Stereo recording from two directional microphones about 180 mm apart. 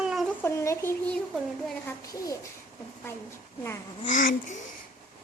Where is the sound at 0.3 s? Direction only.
15° left (ahead or behind).